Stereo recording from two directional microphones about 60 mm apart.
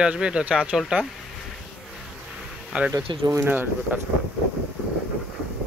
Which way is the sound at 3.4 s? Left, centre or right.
Right.